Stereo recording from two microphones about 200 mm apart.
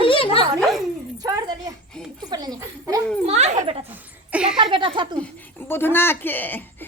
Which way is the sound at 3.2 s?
35° right (ahead or behind).